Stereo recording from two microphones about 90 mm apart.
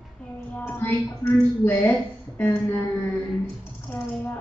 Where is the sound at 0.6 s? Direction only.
20° left (ahead or behind).